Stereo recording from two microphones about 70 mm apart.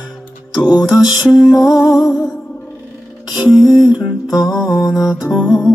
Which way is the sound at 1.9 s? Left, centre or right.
Left.